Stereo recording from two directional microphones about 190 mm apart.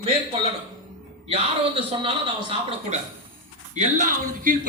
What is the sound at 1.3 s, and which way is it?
A man's voice, 30° right (ahead or behind).